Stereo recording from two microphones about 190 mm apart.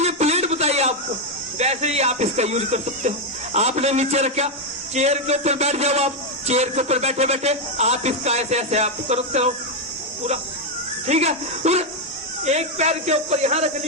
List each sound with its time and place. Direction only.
0.0 s a sound: 35° right (ahead or behind)
1.5 s speech: 35° right (ahead or behind)
11.0 s speech: 35° right (ahead or behind)